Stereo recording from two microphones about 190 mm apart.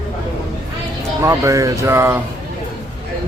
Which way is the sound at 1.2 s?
15° right (ahead or behind).